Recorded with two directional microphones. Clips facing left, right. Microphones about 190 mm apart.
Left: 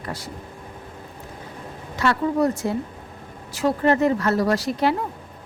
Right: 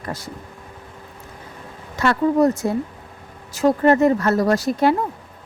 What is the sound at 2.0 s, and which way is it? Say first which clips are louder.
Speech: right 4 dB; 45° right (ahead or behind).